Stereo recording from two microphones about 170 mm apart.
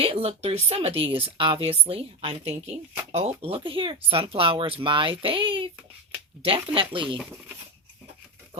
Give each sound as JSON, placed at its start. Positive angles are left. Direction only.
{"t": 0.0, "sound": "speech", "side_deg": -35}
{"t": 6.7, "sound": "speech", "side_deg": -30}
{"t": 7.2, "sound": "speech", "side_deg": -10}